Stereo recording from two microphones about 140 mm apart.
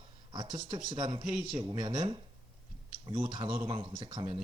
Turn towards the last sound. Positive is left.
turn(degrees=-35)  # may be behind; listen again after turning